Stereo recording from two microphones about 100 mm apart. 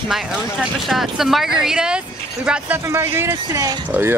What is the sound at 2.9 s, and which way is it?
Speech, 25° right (ahead or behind).